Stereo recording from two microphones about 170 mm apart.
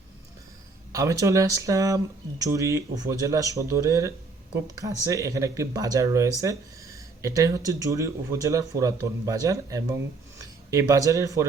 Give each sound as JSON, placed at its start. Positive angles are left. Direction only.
{"t": 0.9, "sound": "speech", "side_deg": -20}